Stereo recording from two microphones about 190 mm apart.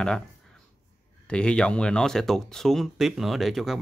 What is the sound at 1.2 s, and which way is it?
Speech, 5° left (ahead or behind).